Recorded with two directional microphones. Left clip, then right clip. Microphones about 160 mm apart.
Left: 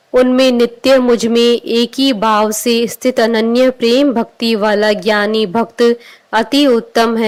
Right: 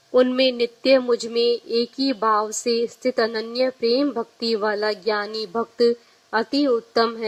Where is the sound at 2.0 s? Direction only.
40° left (ahead or behind).